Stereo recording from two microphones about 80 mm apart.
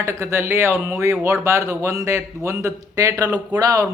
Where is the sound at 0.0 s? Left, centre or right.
Right.